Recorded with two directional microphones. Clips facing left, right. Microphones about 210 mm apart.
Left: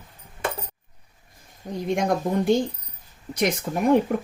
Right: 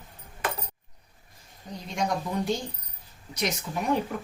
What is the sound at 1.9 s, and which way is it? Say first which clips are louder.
Speech: left 6 dB; 50° left (ahead or behind).